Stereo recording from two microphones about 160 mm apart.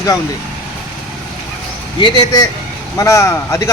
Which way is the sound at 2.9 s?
20° left (ahead or behind).